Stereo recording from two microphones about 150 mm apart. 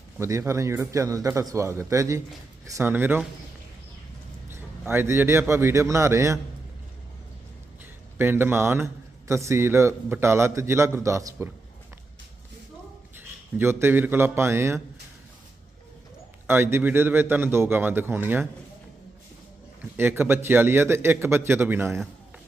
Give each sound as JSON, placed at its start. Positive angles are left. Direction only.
{"t": 0.2, "sound": "a man's voice", "side_deg": -20}
{"t": 4.4, "sound": "a man's voice", "side_deg": -15}
{"t": 8.2, "sound": "a man's voice", "side_deg": -15}
{"t": 13.6, "sound": "a man's voice", "side_deg": -15}
{"t": 16.5, "sound": "a man's voice", "side_deg": -15}
{"t": 20.0, "sound": "a man's voice", "side_deg": -15}